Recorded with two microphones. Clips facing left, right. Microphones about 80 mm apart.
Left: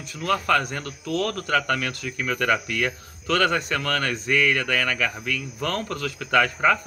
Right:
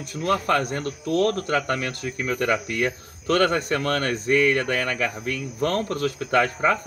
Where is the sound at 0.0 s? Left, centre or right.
Right.